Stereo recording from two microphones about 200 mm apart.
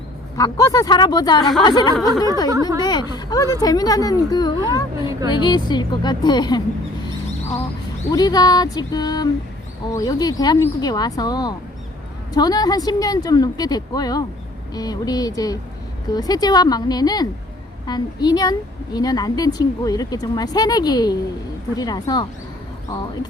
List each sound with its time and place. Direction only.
0.3 s speech: 15° left (ahead or behind)
2.0 s a sound: centre (ahead or behind)
2.5 s speech: 15° right (ahead or behind)
2.8 s speech: 20° left (ahead or behind)
8.1 s speech: 20° left (ahead or behind)